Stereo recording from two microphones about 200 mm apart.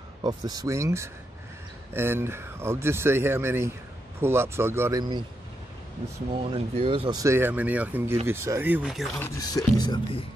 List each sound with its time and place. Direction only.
0.2 s speech: 20° right (ahead or behind)
6.8 s speech: 25° right (ahead or behind); by 9.1 s centre (ahead or behind)
9.2 s speech: 20° left (ahead or behind)